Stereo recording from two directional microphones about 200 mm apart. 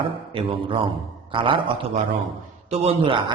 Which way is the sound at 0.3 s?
25° right (ahead or behind).